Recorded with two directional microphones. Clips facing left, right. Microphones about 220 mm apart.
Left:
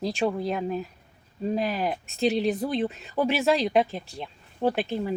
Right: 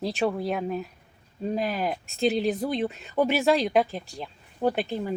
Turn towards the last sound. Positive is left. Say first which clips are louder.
# even
turn(degrees=0)  # may be behind; listen again after turning